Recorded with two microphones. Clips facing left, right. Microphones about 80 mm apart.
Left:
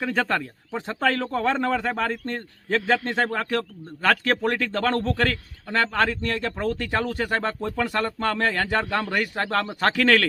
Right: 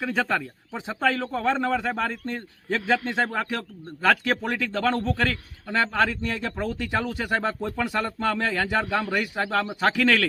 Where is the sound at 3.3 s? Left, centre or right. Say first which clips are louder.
Left 3 dB; centre.